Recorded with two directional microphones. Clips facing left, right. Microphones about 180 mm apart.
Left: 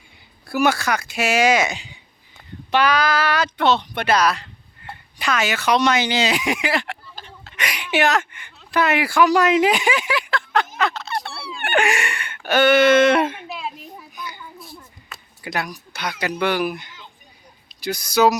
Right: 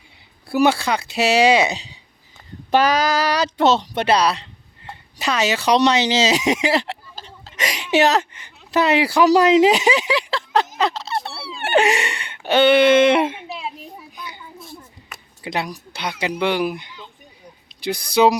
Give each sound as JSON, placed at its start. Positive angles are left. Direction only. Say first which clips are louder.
{"t": 0.5, "sound": "speech", "louder": "right 2 dB", "side_deg": -30}
{"t": 2.7, "sound": "a woman's voice", "louder": "right 2 dB", "side_deg": -40}
{"t": 11.4, "sound": "a sound", "louder": "right 4 dB", "side_deg": -30}
{"t": 14.2, "sound": "children playing", "louder": "left 3 dB", "side_deg": -25}
{"t": 15.4, "sound": "speech", "louder": "right 2 dB", "side_deg": -25}
{"t": 18.2, "sound": "speech", "louder": "right 1 dB", "side_deg": -20}